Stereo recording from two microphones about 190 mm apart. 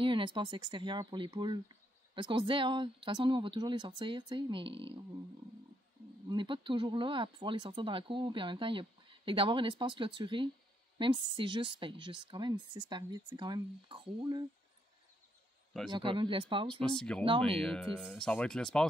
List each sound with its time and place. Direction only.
0.0 s speech: 25° right (ahead or behind)
6.2 s speech: 25° right (ahead or behind)
15.9 s speech: 25° right (ahead or behind)
16.8 s speech: 5° left (ahead or behind)